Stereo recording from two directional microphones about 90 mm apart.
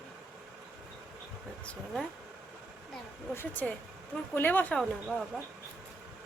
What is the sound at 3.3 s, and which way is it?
Speech, 20° left (ahead or behind).